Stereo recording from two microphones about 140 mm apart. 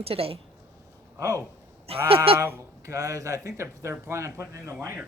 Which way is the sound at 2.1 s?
40° right (ahead or behind).